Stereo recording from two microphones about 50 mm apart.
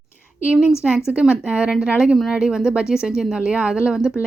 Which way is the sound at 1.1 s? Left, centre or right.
Centre.